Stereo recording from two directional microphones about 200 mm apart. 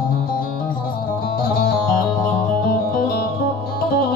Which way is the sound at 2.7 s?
45° left (ahead or behind).